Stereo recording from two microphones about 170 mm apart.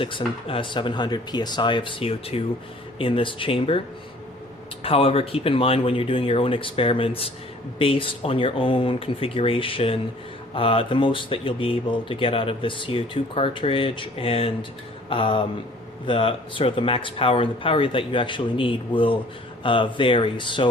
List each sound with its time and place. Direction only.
0.0 s speech: 30° left (ahead or behind)